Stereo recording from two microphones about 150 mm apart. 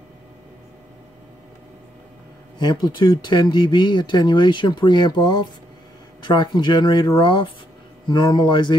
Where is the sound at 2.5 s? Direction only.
30° left (ahead or behind).